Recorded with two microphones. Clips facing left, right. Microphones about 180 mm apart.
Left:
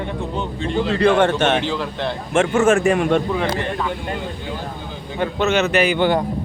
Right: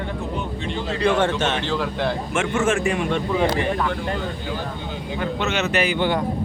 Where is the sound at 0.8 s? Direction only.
60° left (ahead or behind).